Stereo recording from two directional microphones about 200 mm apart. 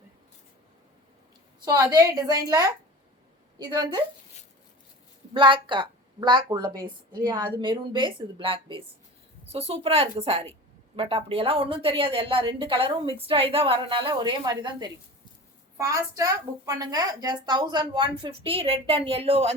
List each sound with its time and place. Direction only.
1.6 s a woman's voice: 20° right (ahead or behind)
5.3 s a woman's voice: 25° right (ahead or behind)